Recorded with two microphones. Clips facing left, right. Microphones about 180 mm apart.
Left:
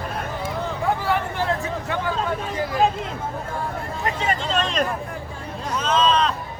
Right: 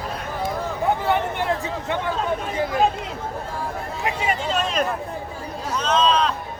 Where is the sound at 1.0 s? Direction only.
20° right (ahead or behind).